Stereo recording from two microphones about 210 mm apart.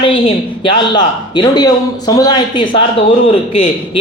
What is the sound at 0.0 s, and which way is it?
Speech, 25° left (ahead or behind).